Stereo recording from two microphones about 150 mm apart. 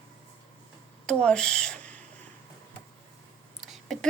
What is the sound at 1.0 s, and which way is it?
Speech, 5° left (ahead or behind).